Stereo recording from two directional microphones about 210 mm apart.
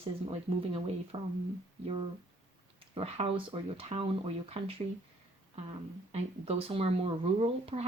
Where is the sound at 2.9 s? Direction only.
30° right (ahead or behind).